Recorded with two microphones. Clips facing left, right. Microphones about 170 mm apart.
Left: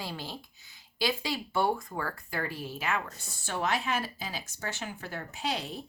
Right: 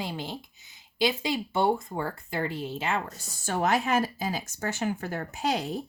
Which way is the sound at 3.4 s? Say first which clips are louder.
Right 5 dB; 45° right (ahead or behind).